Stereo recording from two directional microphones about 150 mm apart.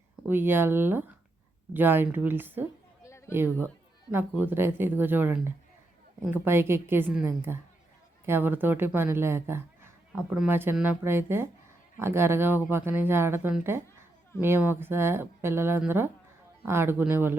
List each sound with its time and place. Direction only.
0.3 s speech: 15° right (ahead or behind)
3.0 s a sound: 20° left (ahead or behind)
4.1 s speech: 15° right (ahead or behind)